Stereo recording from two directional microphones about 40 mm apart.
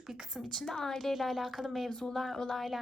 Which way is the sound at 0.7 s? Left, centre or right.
Centre.